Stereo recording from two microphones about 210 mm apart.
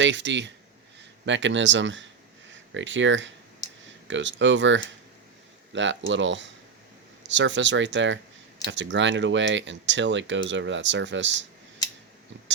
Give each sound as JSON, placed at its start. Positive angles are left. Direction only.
{"t": 0.0, "sound": "speech", "side_deg": -60}